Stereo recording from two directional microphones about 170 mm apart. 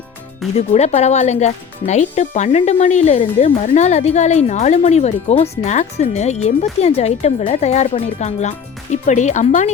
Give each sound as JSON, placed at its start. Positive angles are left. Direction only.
{"t": 0.5, "sound": "speech", "side_deg": 40}